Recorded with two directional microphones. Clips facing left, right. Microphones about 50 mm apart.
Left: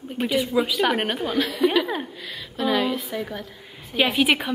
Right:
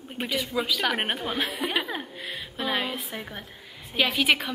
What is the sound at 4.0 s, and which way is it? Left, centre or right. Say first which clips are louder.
Speech: left 3 dB; centre.